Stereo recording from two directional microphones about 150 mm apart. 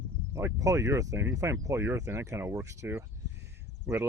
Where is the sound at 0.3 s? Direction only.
20° right (ahead or behind).